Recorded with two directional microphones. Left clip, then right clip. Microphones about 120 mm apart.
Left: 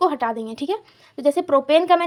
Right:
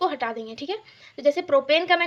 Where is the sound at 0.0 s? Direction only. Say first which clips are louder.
Left 5 dB; 30° left (ahead or behind).